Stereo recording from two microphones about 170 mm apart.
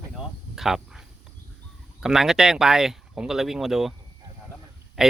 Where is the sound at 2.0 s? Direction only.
Centre (ahead or behind).